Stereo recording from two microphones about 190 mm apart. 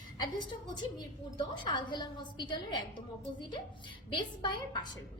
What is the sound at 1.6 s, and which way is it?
A woman's voice, 25° left (ahead or behind).